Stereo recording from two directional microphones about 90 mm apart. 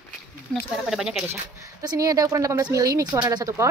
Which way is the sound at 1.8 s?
40° right (ahead or behind).